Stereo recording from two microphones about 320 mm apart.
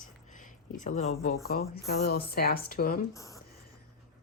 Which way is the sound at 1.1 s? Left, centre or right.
Left.